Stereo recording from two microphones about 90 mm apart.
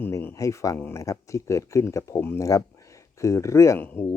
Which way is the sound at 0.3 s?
35° left (ahead or behind).